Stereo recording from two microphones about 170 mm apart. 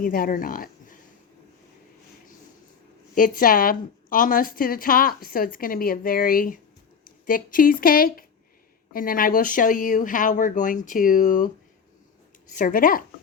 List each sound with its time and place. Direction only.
0.0 s speech: 55° left (ahead or behind)
3.2 s a woman's voice: 55° left (ahead or behind)